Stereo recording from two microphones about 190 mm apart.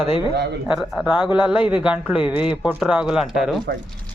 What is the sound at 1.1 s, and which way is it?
Speech, 25° left (ahead or behind).